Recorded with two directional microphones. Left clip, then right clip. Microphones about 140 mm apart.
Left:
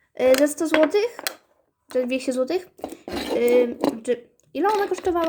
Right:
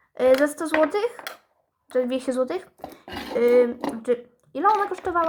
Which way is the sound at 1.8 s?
45° left (ahead or behind).